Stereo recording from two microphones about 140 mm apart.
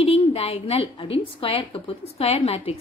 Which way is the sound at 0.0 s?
45° left (ahead or behind).